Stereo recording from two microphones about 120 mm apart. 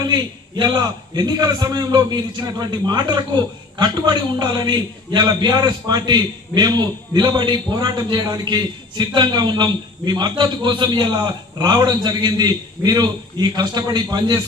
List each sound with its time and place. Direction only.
0.1 s a man's voice: 35° right (ahead or behind)